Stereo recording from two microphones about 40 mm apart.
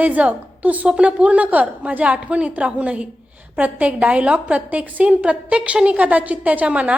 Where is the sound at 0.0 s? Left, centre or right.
Right.